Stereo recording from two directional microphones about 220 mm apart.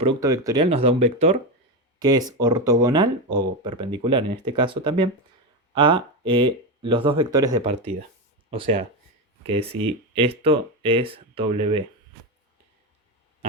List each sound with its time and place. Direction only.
0.0 s speech: 20° right (ahead or behind)
2.0 s speech: 15° right (ahead or behind)